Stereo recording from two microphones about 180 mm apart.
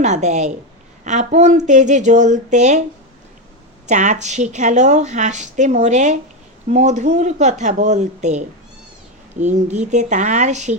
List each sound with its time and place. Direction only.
0.0 s speech: 40° right (ahead or behind)
3.8 s speech: 40° right (ahead or behind)
9.6 s speech: 40° right (ahead or behind)